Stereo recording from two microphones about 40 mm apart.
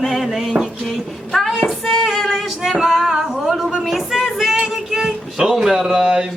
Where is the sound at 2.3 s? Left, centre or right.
Centre.